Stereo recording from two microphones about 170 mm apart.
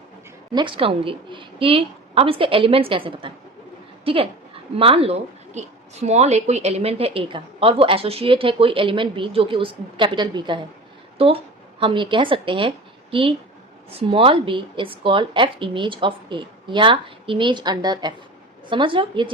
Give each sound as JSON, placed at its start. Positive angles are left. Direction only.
{"t": 0.5, "sound": "a woman's voice", "side_deg": -30}
{"t": 11.8, "sound": "a woman's voice", "side_deg": -30}